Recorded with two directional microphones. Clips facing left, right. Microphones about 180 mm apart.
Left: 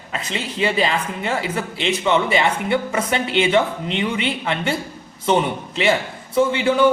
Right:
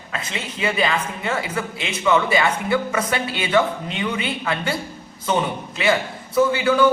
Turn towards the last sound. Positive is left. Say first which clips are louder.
# even
turn(degrees=25)  # may be behind; listen again after turning